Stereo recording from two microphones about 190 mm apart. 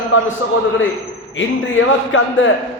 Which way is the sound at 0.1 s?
80° left.